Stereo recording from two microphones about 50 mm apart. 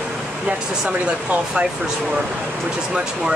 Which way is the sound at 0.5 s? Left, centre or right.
Centre.